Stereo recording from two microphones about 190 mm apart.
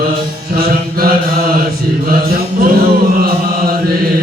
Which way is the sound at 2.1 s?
50° right (ahead or behind).